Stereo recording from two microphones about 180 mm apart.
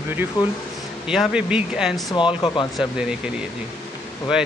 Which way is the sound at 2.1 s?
25° left (ahead or behind).